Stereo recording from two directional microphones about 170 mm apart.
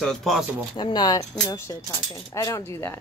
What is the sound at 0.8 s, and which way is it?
Speech, 25° left (ahead or behind).